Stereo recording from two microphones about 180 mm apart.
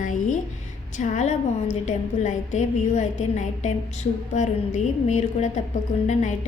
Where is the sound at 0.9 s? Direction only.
45° left (ahead or behind).